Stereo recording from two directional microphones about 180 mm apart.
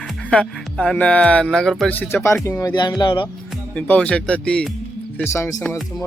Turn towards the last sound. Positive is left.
turn(degrees=15)  # may be behind; listen again after turning